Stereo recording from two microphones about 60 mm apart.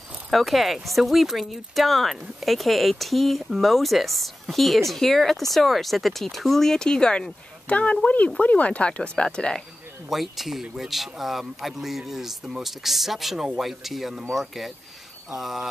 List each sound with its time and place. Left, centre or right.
0.3 s speech: centre
10.0 s speech: centre
15.2 s a sound: centre